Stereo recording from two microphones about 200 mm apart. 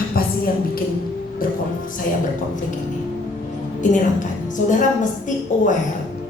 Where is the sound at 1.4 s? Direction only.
45° left (ahead or behind).